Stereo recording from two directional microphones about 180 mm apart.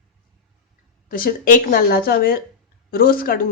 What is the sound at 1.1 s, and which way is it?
Speech, 50° left (ahead or behind).